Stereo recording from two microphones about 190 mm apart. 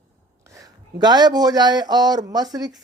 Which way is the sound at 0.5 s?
20° right (ahead or behind).